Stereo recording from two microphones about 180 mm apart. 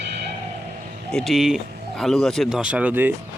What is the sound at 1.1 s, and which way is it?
Speech, centre (ahead or behind).